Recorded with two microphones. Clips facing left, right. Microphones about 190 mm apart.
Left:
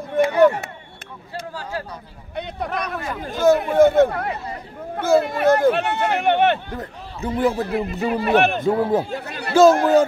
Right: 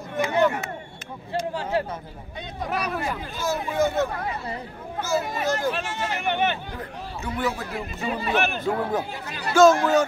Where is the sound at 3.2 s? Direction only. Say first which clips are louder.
Left 11 dB; 55° left (ahead or behind).